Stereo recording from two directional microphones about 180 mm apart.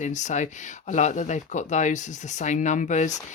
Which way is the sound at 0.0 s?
40° left (ahead or behind).